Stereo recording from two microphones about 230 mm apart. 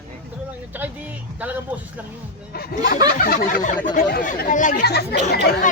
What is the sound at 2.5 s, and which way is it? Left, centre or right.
Speech, left.